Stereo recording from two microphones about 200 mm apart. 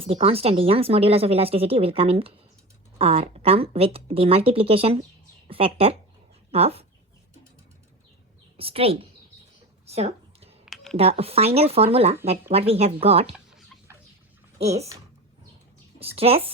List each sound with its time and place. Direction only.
0.0 s speech: 30° right (ahead or behind)
8.5 s speech: 30° right (ahead or behind)
9.8 s a sound: 30° right (ahead or behind)
10.9 s speech: 30° right (ahead or behind)
13.3 s a sound: centre (ahead or behind)
14.6 s speech: 30° right (ahead or behind)
16.1 s speech: 30° right (ahead or behind)